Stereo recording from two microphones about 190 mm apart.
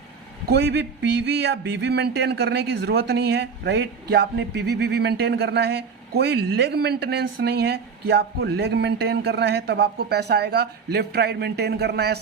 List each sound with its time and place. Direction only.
0.4 s speech: 65° right (ahead or behind)